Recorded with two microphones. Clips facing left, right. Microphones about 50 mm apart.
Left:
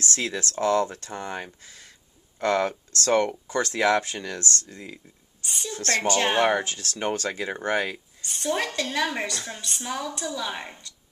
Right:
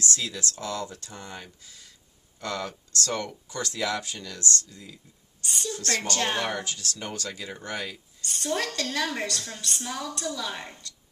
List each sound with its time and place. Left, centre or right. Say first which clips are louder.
0.0 s speech: left 3 dB; left
5.4 s a woman's voice: right 1 dB; centre
5.8 s speech: left 5 dB; left
6.0 s speech: left 9 dB; left
8.2 s a woman's voice: left 2 dB; centre